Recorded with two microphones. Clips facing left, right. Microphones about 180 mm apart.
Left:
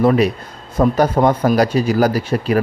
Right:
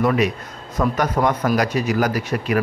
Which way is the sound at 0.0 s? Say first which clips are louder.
Left 5 dB; 30° left (ahead or behind).